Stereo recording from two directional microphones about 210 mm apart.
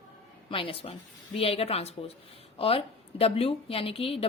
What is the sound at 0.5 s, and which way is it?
A woman's voice, 25° left (ahead or behind).